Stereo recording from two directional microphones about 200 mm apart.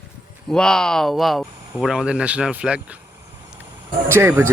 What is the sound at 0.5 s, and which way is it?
Speech, 5° left (ahead or behind).